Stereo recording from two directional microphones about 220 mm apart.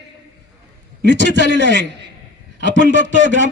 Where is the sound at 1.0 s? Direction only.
55° right (ahead or behind).